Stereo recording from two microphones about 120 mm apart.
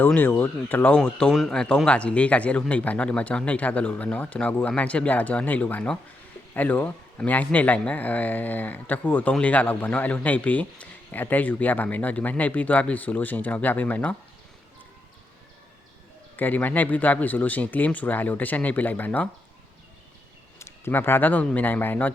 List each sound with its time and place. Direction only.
0.0 s speech: 15° left (ahead or behind)
16.4 s speech: 15° left (ahead or behind)
20.6 s speech: 20° left (ahead or behind)